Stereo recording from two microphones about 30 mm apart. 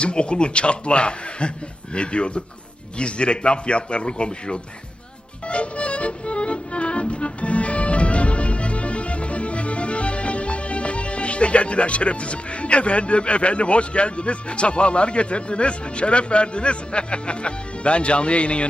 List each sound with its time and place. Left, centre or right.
0.0 s a man's voice: left
5.5 s music: left